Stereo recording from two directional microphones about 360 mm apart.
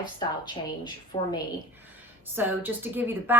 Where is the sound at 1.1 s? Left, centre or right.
Centre.